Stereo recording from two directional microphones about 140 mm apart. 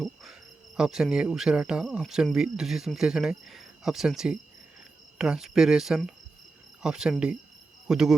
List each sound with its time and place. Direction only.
0.0 s cricket: centre (ahead or behind)
7.9 s speech: 5° right (ahead or behind)